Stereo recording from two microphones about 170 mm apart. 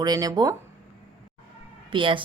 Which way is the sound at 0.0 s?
20° right (ahead or behind).